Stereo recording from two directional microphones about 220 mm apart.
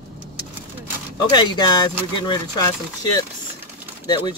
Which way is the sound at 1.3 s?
20° left (ahead or behind).